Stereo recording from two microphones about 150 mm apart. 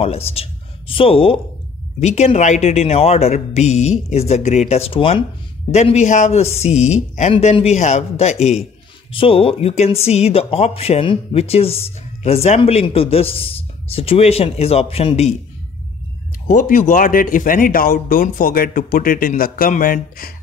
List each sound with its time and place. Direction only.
0.0 s speech: 40° left (ahead or behind)
9.1 s speech: 40° left (ahead or behind)
16.4 s speech: 60° left (ahead or behind); by 20.3 s 75° left (ahead or behind)